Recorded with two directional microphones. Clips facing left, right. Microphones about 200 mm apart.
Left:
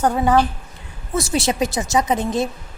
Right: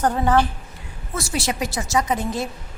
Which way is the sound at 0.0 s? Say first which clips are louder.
Left 2 dB; 10° left (ahead or behind).